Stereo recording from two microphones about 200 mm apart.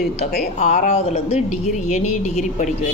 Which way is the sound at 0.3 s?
35° left (ahead or behind).